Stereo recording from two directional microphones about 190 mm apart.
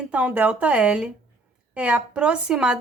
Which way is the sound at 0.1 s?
5° right (ahead or behind).